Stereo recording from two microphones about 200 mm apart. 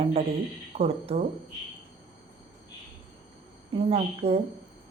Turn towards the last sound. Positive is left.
turn(degrees=-30)  # may be behind; listen again after turning